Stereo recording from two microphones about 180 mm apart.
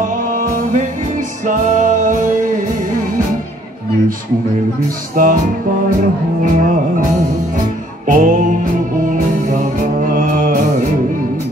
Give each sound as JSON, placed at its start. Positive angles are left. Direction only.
{"t": 1.5, "sound": "music", "side_deg": -45}
{"t": 5.1, "sound": "music", "side_deg": -50}
{"t": 8.1, "sound": "music", "side_deg": -45}
{"t": 10.1, "sound": "music", "side_deg": -45}